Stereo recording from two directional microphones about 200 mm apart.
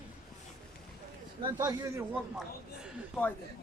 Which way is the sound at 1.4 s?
20° right (ahead or behind).